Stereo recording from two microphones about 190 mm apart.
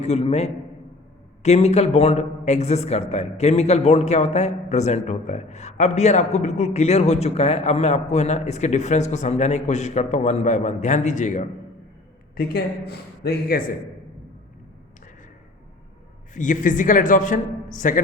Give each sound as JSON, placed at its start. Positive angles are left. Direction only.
{"t": 0.0, "sound": "speech", "side_deg": 35}
{"t": 12.4, "sound": "a man's voice", "side_deg": 55}
{"t": 16.3, "sound": "a man's voice", "side_deg": 40}